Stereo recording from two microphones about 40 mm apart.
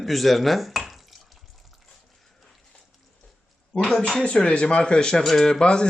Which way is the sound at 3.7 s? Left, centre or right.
Left.